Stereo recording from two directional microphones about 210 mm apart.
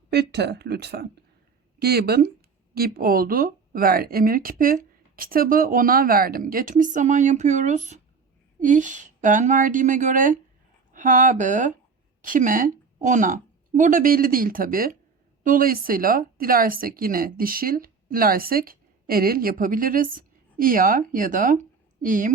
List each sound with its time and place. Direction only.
0.1 s a woman's voice: 50° right (ahead or behind)